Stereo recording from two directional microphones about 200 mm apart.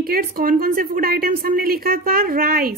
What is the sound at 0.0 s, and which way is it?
A woman's voice, 45° right (ahead or behind).